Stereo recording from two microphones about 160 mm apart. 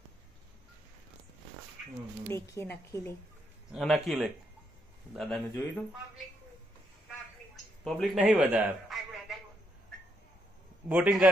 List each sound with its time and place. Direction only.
2.3 s speech: 15° left (ahead or behind)
3.7 s speech: 5° left (ahead or behind)
7.8 s speech: centre (ahead or behind)
8.8 s a sound: centre (ahead or behind)
10.9 s a man's voice: 5° right (ahead or behind)